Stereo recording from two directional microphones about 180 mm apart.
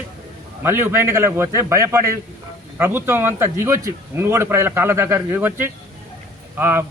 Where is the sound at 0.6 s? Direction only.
10° right (ahead or behind).